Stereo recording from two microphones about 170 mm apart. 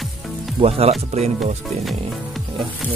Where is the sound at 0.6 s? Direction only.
35° right (ahead or behind).